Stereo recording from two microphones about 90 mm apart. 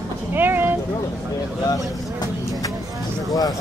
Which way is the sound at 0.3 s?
25° right (ahead or behind).